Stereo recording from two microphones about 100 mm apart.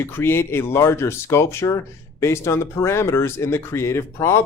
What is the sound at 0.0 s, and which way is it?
Speech, 25° left (ahead or behind).